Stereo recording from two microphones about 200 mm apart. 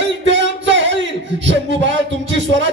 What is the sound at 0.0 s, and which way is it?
Music, 65° right (ahead or behind).